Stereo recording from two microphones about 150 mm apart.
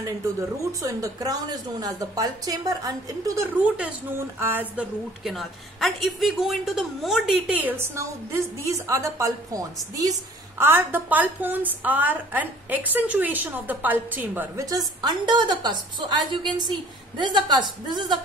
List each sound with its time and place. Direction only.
0.8 s a woman's voice: 25° right (ahead or behind)
3.6 s a woman's voice: 5° right (ahead or behind)
5.2 s a woman's voice: centre (ahead or behind)
14.7 s a woman's voice: 25° right (ahead or behind)